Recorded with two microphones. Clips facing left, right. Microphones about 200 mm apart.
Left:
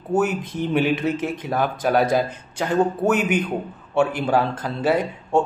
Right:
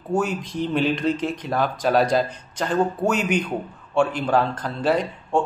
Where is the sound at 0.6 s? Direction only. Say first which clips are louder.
Left 1 dB; 10° left (ahead or behind).